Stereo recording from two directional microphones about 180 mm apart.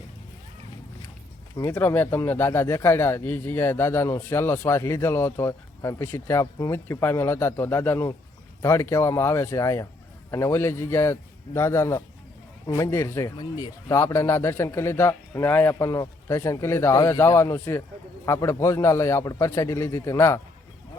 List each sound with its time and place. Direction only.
1.5 s speech: 15° left (ahead or behind)